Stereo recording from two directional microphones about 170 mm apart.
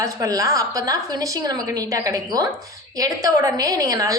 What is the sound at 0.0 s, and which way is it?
A woman's voice, 20° right (ahead or behind).